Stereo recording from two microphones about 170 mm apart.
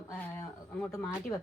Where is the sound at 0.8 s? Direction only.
15° left (ahead or behind).